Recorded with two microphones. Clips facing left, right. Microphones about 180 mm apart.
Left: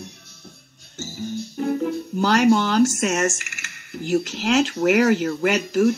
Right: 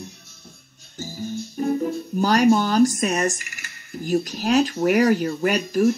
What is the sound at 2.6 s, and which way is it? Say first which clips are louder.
Speech: right 1 dB; 75° left (ahead or behind).